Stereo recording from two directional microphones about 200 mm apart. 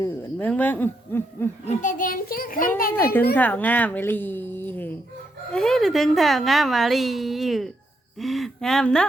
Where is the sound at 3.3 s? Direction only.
10° left (ahead or behind).